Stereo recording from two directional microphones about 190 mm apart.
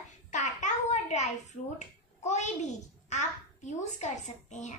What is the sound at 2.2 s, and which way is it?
Babbling, 40° left (ahead or behind).